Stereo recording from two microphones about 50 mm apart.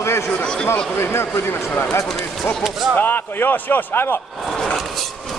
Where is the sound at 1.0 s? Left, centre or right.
Left.